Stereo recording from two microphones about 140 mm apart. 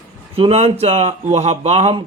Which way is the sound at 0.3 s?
45° right (ahead or behind).